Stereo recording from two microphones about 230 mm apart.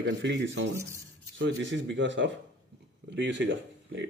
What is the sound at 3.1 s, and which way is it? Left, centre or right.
Speech, right.